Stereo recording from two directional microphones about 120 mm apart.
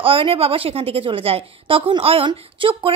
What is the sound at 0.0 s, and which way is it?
A woman's voice, 50° right (ahead or behind).